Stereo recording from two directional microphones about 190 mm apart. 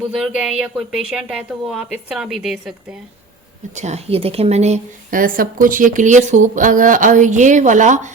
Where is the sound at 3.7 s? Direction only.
35° right (ahead or behind).